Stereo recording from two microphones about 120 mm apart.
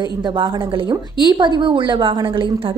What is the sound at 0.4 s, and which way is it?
A woman's voice, 45° right (ahead or behind).